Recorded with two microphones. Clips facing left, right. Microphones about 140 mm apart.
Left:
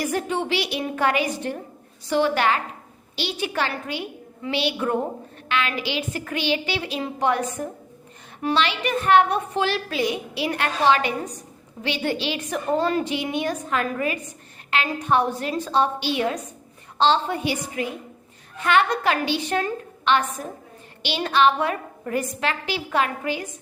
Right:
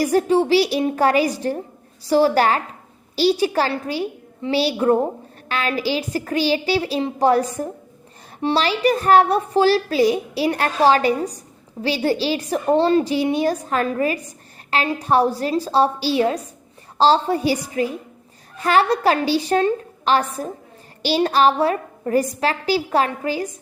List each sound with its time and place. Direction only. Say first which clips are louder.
0.0 s a woman's voice: right 8 dB; 35° right (ahead or behind)